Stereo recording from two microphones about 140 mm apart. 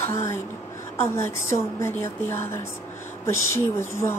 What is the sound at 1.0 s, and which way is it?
A woman's voice, 20° left (ahead or behind).